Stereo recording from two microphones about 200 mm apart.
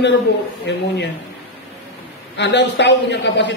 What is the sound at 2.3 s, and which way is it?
A woman's voice, 60° left (ahead or behind).